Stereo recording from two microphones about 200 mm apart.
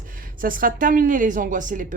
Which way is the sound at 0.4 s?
45° right (ahead or behind).